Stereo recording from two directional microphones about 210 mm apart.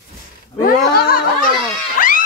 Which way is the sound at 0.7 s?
45° left (ahead or behind).